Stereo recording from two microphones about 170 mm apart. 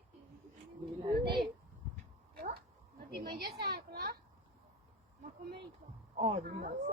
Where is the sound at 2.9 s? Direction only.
65° right (ahead or behind).